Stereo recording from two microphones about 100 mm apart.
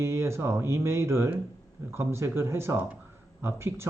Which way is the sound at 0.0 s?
30° right (ahead or behind).